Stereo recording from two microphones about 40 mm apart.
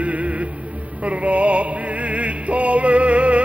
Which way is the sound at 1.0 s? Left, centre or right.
Right.